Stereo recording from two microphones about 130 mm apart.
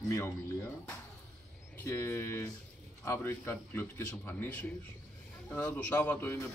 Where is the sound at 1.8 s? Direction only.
20° left (ahead or behind).